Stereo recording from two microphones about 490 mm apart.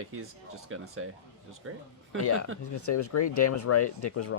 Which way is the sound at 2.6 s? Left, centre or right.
Left.